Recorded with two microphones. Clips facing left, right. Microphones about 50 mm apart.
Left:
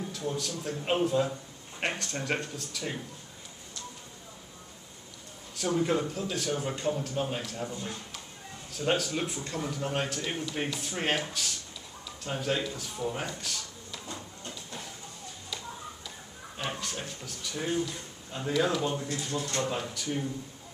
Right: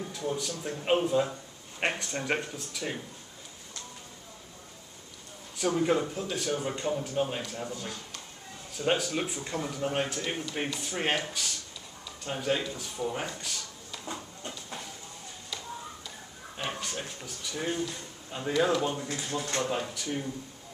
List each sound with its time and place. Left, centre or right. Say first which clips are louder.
0.1 s a man's voice: right 1 dB; centre
5.6 s speech: right 1 dB; centre
8.7 s speech: right 1 dB; centre
14.0 s a sound: right 4 dB; centre
16.5 s speech: even; centre